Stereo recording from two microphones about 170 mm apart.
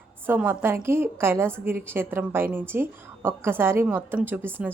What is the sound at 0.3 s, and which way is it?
A woman's voice, 10° right (ahead or behind).